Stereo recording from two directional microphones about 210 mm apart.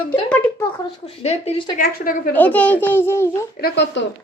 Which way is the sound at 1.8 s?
40° left (ahead or behind).